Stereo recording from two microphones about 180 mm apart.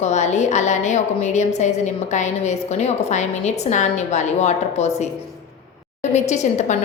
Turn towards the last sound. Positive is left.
turn(degrees=40)  # may be behind; listen again after turning